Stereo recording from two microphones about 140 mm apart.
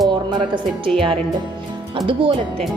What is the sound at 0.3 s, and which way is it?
Speech, 35° right (ahead or behind).